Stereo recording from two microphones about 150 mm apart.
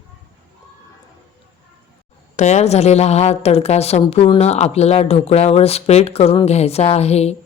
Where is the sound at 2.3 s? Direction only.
50° left (ahead or behind).